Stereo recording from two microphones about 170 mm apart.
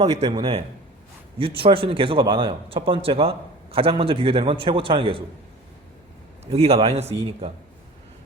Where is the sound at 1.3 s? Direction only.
30° right (ahead or behind).